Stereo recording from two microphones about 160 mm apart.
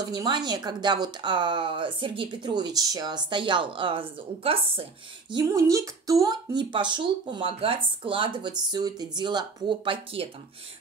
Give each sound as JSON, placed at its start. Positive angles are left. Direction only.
{"t": 0.1, "sound": "speech", "side_deg": -25}
{"t": 5.3, "sound": "speech", "side_deg": -20}